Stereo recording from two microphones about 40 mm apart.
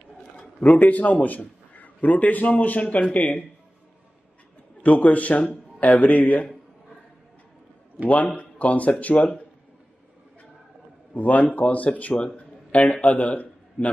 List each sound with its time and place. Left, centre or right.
0.7 s a man's voice: left
4.8 s speech: left
8.4 s speech: left
11.1 s speech: left
12.4 s a sound: left